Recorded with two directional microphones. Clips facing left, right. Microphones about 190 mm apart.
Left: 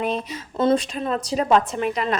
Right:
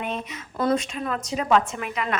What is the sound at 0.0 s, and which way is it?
A woman's voice, 30° left (ahead or behind).